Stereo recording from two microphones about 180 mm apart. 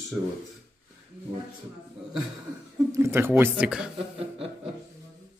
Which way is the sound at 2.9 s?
15° right (ahead or behind).